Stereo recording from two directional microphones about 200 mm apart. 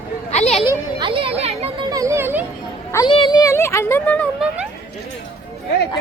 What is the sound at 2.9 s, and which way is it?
Speech, 25° left (ahead or behind).